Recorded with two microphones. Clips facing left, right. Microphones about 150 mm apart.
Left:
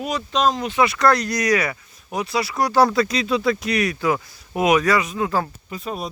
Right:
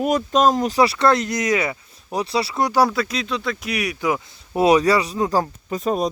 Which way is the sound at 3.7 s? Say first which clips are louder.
Left 2 dB; 10° right (ahead or behind).